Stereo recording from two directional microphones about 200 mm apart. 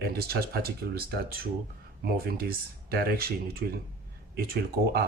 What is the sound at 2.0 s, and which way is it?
Speech, 50° right (ahead or behind).